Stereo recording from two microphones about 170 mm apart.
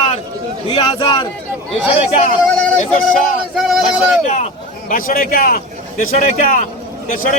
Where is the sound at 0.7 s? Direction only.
25° left (ahead or behind).